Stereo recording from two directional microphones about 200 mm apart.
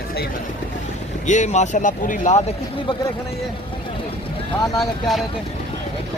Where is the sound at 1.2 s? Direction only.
35° left (ahead or behind).